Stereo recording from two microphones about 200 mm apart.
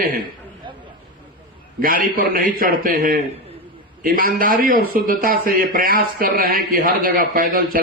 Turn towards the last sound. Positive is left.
turn(degrees=-45)  # may be behind; listen again after turning